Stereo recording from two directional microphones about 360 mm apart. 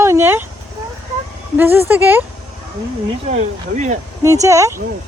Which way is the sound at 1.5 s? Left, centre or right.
Centre.